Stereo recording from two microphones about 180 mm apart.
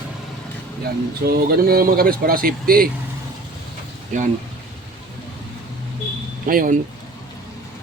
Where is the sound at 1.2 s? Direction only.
60° right (ahead or behind).